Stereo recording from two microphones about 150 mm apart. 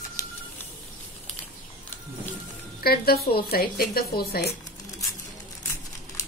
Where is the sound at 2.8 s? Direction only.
90° left.